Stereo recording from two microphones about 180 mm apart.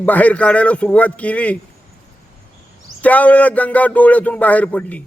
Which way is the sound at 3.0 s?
10° left (ahead or behind).